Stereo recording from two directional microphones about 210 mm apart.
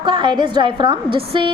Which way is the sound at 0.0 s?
20° right (ahead or behind).